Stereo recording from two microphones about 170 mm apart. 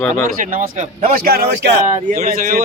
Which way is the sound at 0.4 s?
55° right (ahead or behind).